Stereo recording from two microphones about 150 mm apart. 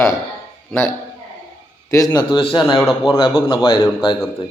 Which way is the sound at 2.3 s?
35° left (ahead or behind).